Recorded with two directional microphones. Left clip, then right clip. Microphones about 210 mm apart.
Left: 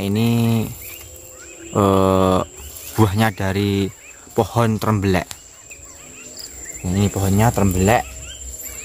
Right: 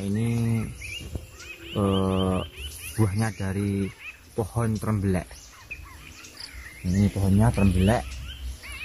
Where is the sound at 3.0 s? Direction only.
65° left (ahead or behind).